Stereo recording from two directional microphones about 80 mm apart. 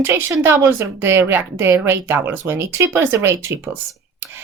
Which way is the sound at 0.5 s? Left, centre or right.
Right.